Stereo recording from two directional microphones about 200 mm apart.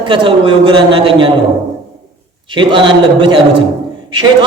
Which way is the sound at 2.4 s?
25° right (ahead or behind).